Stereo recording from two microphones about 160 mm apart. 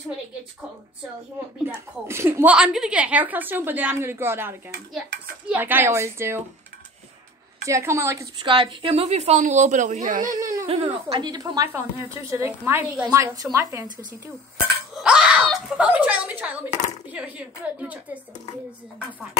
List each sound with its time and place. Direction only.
1.7 s a woman's voice: 15° right (ahead or behind)
7.6 s a woman's voice: 20° right (ahead or behind)
8.4 s a woman's voice: 30° right (ahead or behind); by 10.7 s 55° right (ahead or behind)
10.7 s a woman's voice: 35° right (ahead or behind); by 14.3 s 20° right (ahead or behind)
15.0 s a woman's voice: 5° right (ahead or behind)